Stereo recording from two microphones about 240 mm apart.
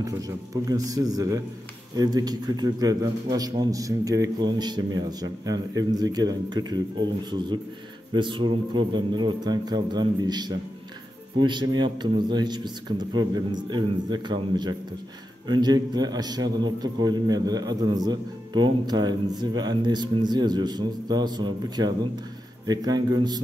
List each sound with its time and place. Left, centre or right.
0.0 s a man's voice: centre